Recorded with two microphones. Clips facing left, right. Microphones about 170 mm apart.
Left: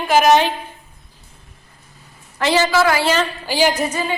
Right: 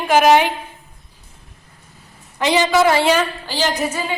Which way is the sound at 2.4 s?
15° right (ahead or behind).